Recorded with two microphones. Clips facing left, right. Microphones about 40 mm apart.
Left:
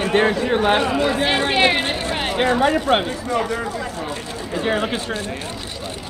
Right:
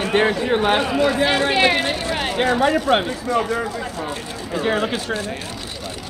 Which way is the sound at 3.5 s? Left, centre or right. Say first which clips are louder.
Right 1 dB; centre.